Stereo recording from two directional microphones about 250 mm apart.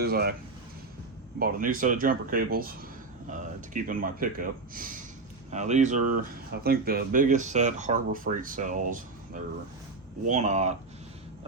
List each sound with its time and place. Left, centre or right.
0.0 s speech: right
1.4 s speech: right